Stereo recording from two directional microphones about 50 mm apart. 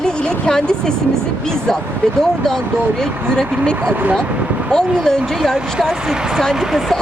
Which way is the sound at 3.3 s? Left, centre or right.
Centre.